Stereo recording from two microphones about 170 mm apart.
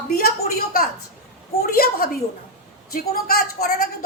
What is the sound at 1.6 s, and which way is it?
A woman's voice, 60° left (ahead or behind).